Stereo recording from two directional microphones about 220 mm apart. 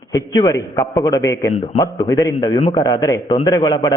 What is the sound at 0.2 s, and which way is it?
A man's voice, 15° left (ahead or behind).